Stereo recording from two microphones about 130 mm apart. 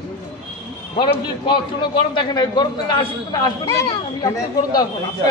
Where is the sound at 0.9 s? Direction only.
35° left (ahead or behind).